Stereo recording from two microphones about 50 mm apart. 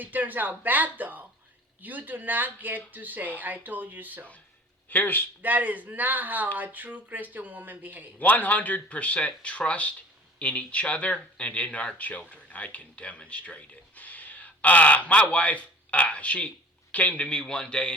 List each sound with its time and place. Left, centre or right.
0.0 s speech: right
4.9 s speech: left
5.4 s speech: right
8.2 s speech: left; by 17.9 s centre